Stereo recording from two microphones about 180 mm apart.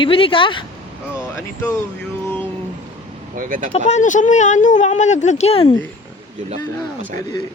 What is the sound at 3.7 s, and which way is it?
Speech, 40° left (ahead or behind).